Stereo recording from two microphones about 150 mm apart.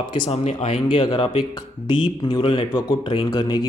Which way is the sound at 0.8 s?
30° left (ahead or behind).